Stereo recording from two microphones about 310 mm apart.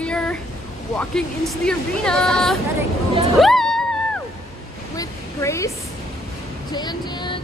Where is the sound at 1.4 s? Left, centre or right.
Centre.